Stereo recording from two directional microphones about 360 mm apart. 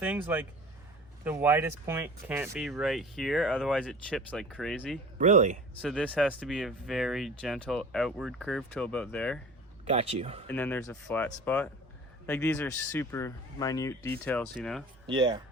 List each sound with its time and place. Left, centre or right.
0.0 s speech: centre
5.1 s speech: centre
5.8 s speech: centre
9.8 s speech: centre
10.5 s speech: centre
15.0 s speech: centre